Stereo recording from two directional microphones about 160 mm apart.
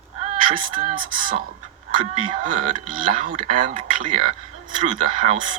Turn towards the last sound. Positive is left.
turn(degrees=-55)  # may be behind; listen again after turning